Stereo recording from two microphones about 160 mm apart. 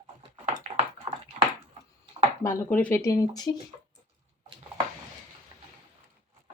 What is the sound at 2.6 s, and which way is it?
Speech, 10° left (ahead or behind).